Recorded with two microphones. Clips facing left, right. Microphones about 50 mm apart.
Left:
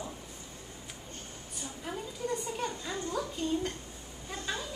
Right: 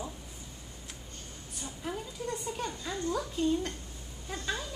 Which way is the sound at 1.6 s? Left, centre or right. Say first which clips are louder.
Right 1 dB; centre.